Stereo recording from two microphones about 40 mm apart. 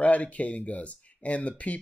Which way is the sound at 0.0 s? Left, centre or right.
Left.